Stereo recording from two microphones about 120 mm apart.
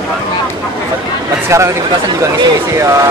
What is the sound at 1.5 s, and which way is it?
Speech, 25° right (ahead or behind).